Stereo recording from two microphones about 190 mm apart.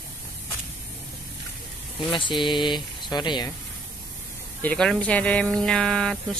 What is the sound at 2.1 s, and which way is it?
Speech, 25° left (ahead or behind).